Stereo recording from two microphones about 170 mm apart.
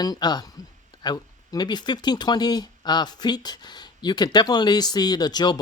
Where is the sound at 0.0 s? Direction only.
25° left (ahead or behind).